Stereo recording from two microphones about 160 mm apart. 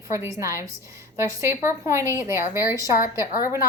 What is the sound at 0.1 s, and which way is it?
A woman's voice, 20° right (ahead or behind).